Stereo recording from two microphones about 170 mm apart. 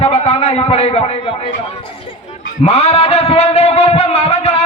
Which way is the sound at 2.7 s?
35° left (ahead or behind).